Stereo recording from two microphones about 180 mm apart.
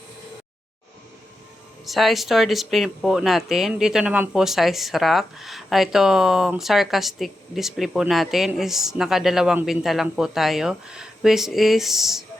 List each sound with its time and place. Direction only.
1.8 s speech: centre (ahead or behind)